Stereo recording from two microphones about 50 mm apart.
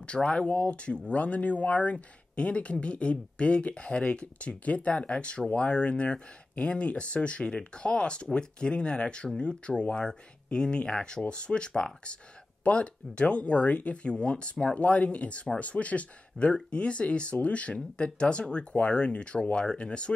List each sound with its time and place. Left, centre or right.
0.0 s speech: left